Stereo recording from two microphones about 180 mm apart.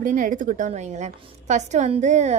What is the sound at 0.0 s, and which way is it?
A woman's voice, 45° right (ahead or behind).